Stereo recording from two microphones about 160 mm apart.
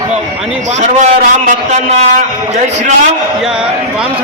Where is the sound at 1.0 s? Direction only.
45° right (ahead or behind).